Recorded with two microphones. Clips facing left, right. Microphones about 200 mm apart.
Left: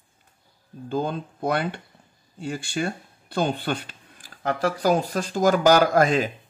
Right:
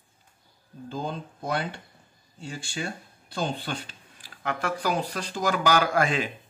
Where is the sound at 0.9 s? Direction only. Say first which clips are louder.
Left 6 dB; 60° left (ahead or behind).